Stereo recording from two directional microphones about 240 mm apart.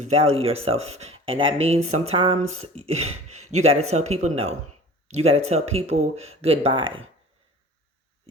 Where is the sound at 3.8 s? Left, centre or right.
Right.